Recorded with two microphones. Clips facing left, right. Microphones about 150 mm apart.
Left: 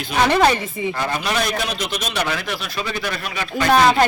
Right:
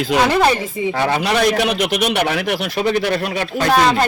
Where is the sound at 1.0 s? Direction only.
70° right (ahead or behind).